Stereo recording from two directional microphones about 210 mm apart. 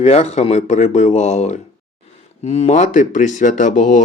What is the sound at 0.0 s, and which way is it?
Speech, 30° left (ahead or behind).